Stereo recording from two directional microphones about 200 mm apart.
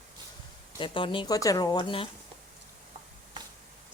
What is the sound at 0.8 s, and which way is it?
Speech, 25° left (ahead or behind).